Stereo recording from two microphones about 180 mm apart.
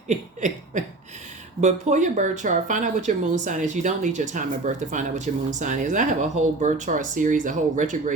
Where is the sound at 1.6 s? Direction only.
40° right (ahead or behind).